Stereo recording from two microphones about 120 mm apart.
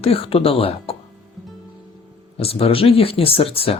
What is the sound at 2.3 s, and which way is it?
Speech, 55° left (ahead or behind).